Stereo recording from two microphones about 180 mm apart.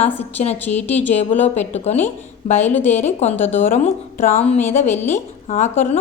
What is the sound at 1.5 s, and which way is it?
A woman's voice, 35° left (ahead or behind).